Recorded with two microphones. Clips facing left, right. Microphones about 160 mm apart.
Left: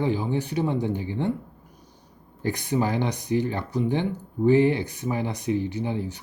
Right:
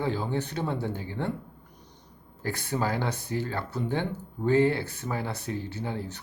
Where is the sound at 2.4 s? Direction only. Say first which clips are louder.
Left 5 dB; 15° left (ahead or behind).